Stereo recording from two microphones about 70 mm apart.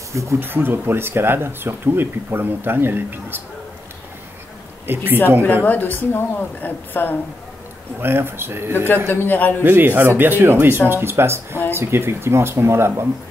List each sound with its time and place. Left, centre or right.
0.1 s speech: right
0.4 s speech: right
4.8 s speech: right
5.4 s a woman's voice: left
8.0 s speech: right
8.7 s a man's voice: left
9.6 s speech: right